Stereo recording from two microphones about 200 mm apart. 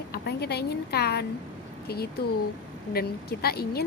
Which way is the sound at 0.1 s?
55° left (ahead or behind).